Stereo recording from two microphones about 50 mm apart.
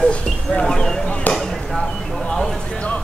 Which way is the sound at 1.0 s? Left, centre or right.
Left.